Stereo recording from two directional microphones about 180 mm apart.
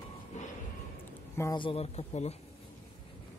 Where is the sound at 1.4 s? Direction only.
25° left (ahead or behind).